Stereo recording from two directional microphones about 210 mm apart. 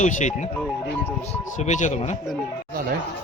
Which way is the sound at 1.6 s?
35° left (ahead or behind).